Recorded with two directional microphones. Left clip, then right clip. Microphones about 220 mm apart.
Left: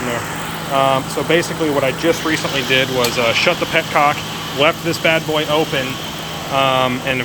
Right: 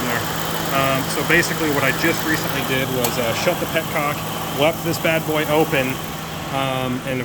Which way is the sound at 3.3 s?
Centre (ahead or behind).